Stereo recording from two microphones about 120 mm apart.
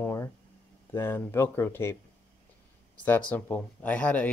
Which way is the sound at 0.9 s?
20° left (ahead or behind).